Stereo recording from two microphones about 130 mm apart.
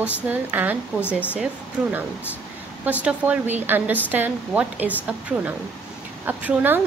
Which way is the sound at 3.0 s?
10° right (ahead or behind).